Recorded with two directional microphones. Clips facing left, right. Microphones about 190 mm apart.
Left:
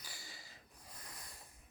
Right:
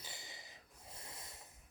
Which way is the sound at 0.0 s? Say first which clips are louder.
Right 2 dB; 20° right (ahead or behind).